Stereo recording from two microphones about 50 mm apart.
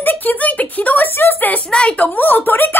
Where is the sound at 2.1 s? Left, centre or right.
Left.